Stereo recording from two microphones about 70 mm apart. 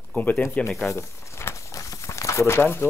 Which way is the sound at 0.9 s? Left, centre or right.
Left.